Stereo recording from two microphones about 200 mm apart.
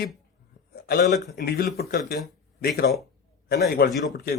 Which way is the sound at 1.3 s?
50° left (ahead or behind).